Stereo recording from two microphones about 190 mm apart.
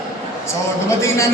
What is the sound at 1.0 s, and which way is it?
Speech, 15° left (ahead or behind).